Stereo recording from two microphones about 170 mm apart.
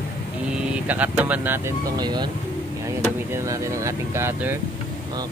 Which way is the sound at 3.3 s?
15° right (ahead or behind).